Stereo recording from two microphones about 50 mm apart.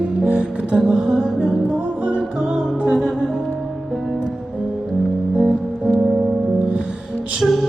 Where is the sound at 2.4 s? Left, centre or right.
Centre.